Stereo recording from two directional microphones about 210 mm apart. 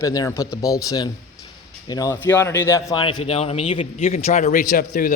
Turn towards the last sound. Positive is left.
turn(degrees=40)  # may be behind; listen again after turning